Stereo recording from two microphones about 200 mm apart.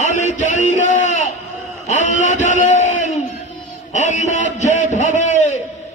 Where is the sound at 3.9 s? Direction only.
35° left (ahead or behind).